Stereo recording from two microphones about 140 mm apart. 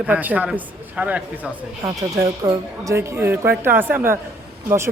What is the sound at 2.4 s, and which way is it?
Speech, 20° right (ahead or behind).